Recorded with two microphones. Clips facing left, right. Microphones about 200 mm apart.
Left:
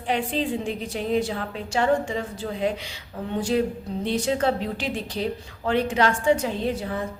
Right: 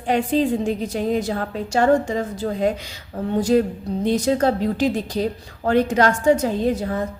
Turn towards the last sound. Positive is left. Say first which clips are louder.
# right 5 dB
turn(degrees=-45)  # may be behind; listen again after turning